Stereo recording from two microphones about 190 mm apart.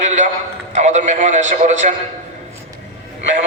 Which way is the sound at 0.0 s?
40° right (ahead or behind).